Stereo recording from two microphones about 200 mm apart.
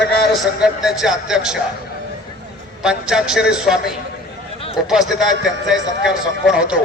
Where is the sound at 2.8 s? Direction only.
5° right (ahead or behind).